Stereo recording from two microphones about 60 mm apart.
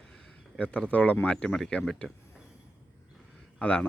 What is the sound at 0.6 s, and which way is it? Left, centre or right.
Speech, left.